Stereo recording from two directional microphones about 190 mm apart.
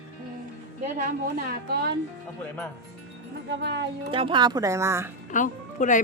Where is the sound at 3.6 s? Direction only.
65° right (ahead or behind).